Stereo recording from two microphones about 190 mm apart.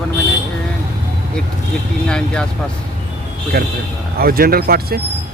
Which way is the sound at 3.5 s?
55° right (ahead or behind).